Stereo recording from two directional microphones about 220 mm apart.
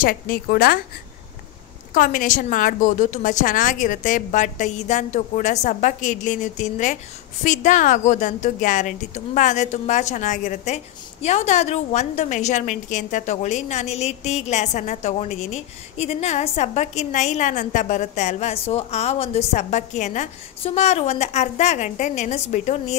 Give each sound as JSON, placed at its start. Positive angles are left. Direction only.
{"t": 0.0, "sound": "a woman's voice", "side_deg": 40}
{"t": 2.0, "sound": "a woman's voice", "side_deg": 35}